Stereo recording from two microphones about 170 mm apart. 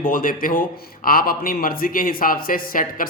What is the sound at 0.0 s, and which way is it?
Speech, 55° left (ahead or behind).